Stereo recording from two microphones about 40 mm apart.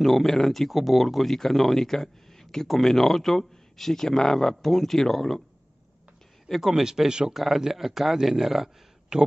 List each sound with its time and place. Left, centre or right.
0.0 s speech: centre
6.6 s speech: centre
7.3 s speech: centre
9.1 s speech: right